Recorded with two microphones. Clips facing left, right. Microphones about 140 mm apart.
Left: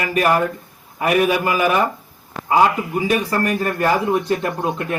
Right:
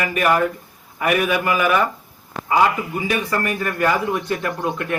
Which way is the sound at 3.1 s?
40° left (ahead or behind).